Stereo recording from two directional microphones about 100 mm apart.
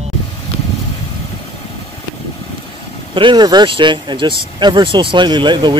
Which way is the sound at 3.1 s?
55° right (ahead or behind).